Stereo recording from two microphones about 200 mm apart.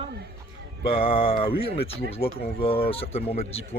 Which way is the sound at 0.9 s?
25° left (ahead or behind).